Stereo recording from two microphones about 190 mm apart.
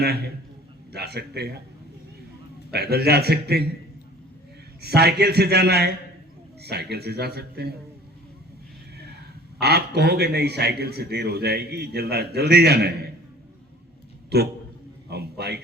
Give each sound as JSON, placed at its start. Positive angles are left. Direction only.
{"t": 0.0, "sound": "a man's voice", "side_deg": -60}
{"t": 2.7, "sound": "a man's voice", "side_deg": -55}
{"t": 4.8, "sound": "a man's voice", "side_deg": -55}
{"t": 9.0, "sound": "a man's voice", "side_deg": -60}
{"t": 14.3, "sound": "a man's voice", "side_deg": -60}